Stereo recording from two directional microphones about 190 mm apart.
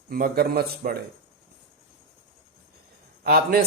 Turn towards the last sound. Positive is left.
turn(degrees=-50)  # may be behind; listen again after turning